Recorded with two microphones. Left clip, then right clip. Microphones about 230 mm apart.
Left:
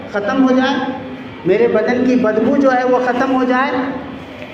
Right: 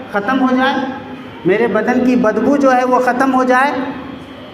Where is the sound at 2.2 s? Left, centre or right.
Right.